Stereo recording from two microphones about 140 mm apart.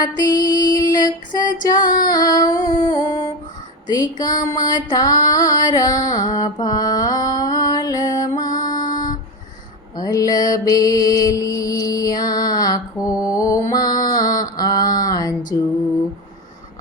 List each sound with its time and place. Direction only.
0.2 s music: 30° left (ahead or behind)
6.1 s mantra: 25° left (ahead or behind)
8.6 s music: 30° left (ahead or behind)
10.0 s music: 25° left (ahead or behind)